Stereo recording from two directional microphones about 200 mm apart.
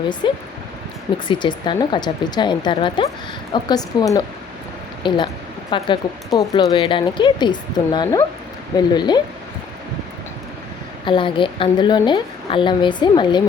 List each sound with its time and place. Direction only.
0.2 s speech: 25° left (ahead or behind)
11.0 s speech: 25° left (ahead or behind)